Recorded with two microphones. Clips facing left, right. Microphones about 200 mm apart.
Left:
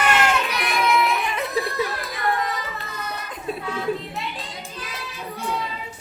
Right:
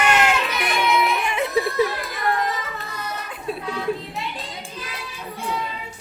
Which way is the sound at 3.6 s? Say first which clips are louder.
Even; centre (ahead or behind).